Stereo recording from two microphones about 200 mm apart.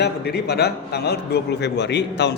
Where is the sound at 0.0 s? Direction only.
55° left (ahead or behind).